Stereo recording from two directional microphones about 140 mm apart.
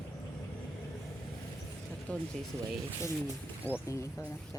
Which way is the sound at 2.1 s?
10° left (ahead or behind).